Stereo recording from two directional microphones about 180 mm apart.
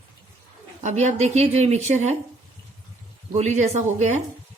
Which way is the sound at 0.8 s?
40° right (ahead or behind).